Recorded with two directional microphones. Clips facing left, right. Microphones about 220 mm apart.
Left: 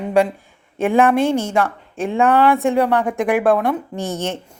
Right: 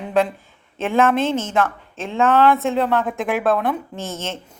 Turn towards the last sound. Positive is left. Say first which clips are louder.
# left 5 dB
turn(degrees=15)  # may be behind; listen again after turning